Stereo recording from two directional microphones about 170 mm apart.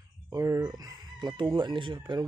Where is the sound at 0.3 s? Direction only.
20° right (ahead or behind).